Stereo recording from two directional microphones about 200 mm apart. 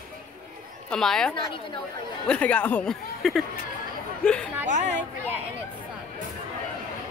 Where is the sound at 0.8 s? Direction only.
5° left (ahead or behind).